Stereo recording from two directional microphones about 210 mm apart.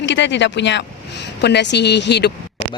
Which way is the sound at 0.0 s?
60° left (ahead or behind).